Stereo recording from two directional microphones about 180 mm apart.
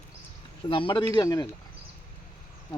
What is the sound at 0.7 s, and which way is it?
Speech, 30° left (ahead or behind).